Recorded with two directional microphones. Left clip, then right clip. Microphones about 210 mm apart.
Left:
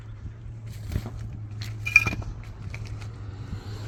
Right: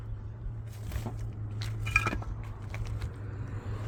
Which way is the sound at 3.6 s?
25° left (ahead or behind).